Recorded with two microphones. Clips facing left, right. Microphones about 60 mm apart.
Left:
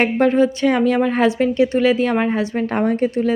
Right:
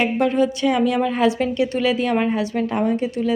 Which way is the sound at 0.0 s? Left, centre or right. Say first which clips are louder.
Left 3 dB; left.